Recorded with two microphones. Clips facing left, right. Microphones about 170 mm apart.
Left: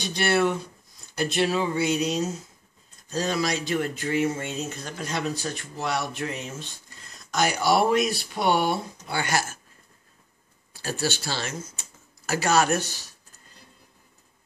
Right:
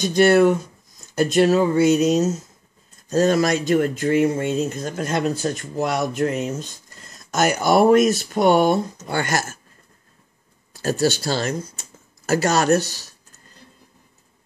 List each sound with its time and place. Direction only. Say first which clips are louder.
0.0 s speech: right 9 dB; 45° right (ahead or behind)
10.7 s speech: right 9 dB; 45° right (ahead or behind)